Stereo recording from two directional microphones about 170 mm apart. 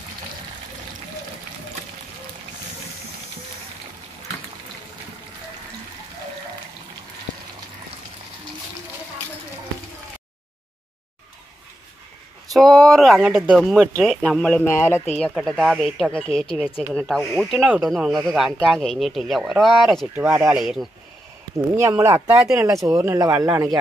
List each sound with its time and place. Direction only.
12.5 s speech: centre (ahead or behind)
15.1 s speech: 5° left (ahead or behind)
20.2 s speech: 15° right (ahead or behind)
20.6 s speech: 5° right (ahead or behind)
21.7 s speech: 15° right (ahead or behind)